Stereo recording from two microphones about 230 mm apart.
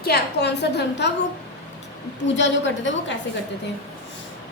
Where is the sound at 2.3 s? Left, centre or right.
Left.